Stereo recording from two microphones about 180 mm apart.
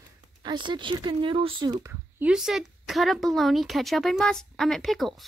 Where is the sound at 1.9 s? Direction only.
5° right (ahead or behind).